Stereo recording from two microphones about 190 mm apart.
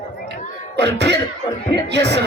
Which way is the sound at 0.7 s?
65° right (ahead or behind).